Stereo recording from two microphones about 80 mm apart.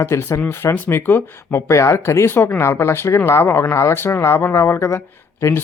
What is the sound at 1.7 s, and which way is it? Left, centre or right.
Speech, left.